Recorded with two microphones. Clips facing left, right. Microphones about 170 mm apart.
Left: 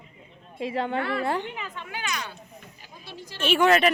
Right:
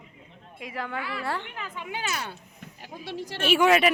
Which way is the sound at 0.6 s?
25° left (ahead or behind).